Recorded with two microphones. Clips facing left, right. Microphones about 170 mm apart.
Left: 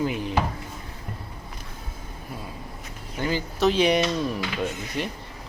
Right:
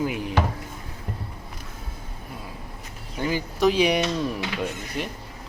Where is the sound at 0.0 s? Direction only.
15° right (ahead or behind).